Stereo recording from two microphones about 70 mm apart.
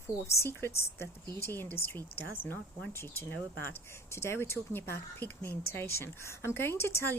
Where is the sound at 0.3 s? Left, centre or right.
Left.